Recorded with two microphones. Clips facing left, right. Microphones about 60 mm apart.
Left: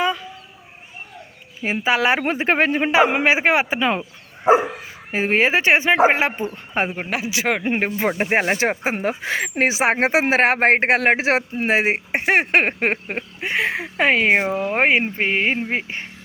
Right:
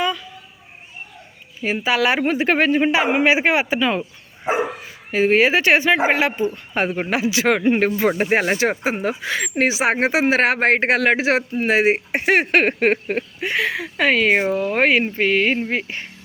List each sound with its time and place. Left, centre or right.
0.0 s a sound: left
1.6 s speech: left
5.1 s speech: left
7.1 s a man's voice: centre
7.6 s speech: centre
8.2 s speech: left
14.3 s speech: left